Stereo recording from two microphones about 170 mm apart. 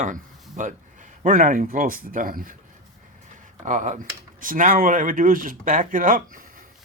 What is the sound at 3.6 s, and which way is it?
Speech, 45° right (ahead or behind).